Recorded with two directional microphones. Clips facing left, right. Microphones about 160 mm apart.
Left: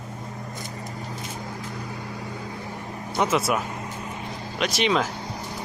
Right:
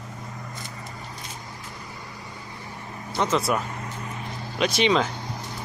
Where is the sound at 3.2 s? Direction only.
5° left (ahead or behind).